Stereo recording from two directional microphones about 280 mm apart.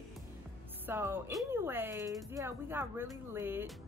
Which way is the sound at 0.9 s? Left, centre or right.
Centre.